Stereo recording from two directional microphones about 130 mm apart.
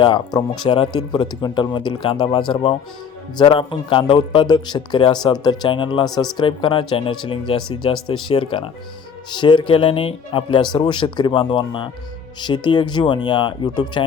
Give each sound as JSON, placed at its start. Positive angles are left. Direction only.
{"t": 0.0, "sound": "speech", "side_deg": 35}